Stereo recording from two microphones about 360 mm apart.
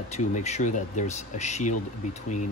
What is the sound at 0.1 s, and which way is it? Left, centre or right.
Speech, centre.